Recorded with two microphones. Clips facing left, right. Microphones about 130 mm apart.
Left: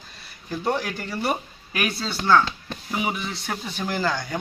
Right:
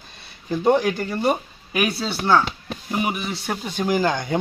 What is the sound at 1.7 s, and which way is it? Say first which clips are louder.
Speech: right 4 dB; 5° right (ahead or behind).